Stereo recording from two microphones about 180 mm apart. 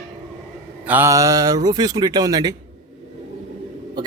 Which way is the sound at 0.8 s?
10° right (ahead or behind).